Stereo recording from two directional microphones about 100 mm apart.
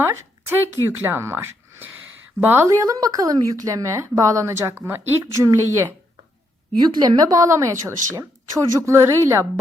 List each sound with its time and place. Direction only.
0.0 s a woman's voice: 20° right (ahead or behind)
2.6 s a woman's voice: 35° right (ahead or behind)
6.7 s a woman's voice: 45° right (ahead or behind); by 9.5 s 30° right (ahead or behind)